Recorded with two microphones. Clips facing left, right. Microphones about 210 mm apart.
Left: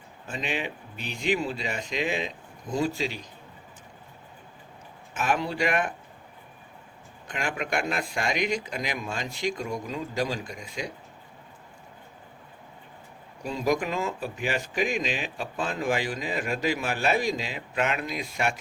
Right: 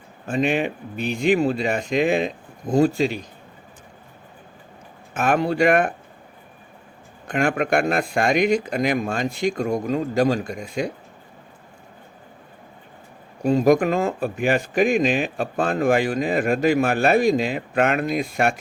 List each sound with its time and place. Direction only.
0.3 s speech: 55° right (ahead or behind)
5.1 s speech: 55° right (ahead or behind)
7.3 s speech: 55° right (ahead or behind)
13.4 s speech: 50° right (ahead or behind)